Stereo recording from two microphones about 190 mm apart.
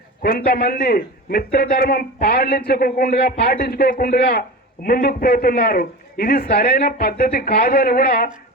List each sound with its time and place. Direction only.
0.2 s a man's voice: 55° left (ahead or behind)